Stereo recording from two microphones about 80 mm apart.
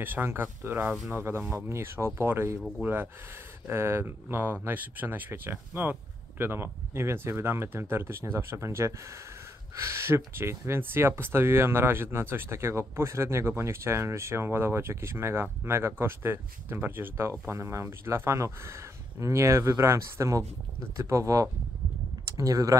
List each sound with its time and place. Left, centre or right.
0.0 s speech: right